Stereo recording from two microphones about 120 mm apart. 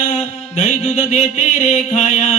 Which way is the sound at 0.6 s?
75° left (ahead or behind).